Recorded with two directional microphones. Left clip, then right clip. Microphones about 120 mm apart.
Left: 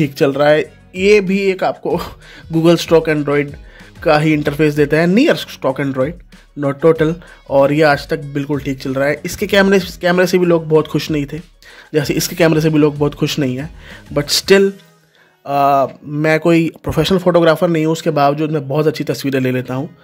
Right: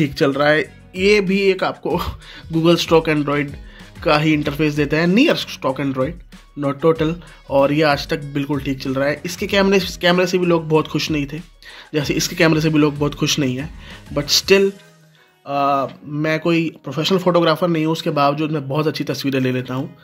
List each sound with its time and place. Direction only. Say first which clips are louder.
0.0 s speech: left 3 dB; 20° left (ahead or behind)
2.5 s speech: left 3 dB; 30° left (ahead or behind)
4.0 s a man's voice: left 3 dB; 30° left (ahead or behind); by 16.7 s 45° left (ahead or behind)
17.0 s a man's voice: left 4 dB; 30° left (ahead or behind)